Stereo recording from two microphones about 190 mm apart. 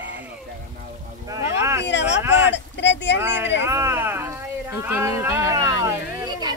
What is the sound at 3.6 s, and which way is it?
Speech, 10° right (ahead or behind).